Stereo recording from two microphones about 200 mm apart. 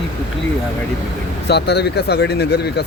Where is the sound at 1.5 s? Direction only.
55° left (ahead or behind).